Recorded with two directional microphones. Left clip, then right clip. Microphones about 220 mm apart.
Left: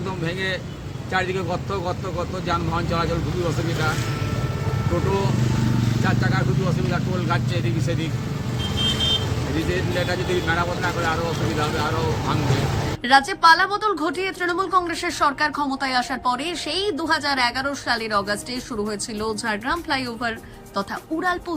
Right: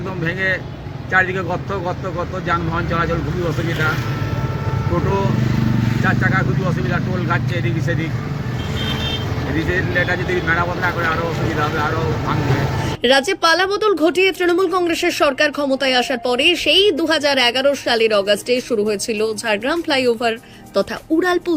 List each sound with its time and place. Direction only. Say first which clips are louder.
1.1 s speech: right 7 dB; centre (ahead or behind)
6.1 s speech: right 7 dB; centre (ahead or behind)
9.6 s speech: right 7 dB; centre (ahead or behind)
13.1 s a woman's voice: even; 15° right (ahead or behind)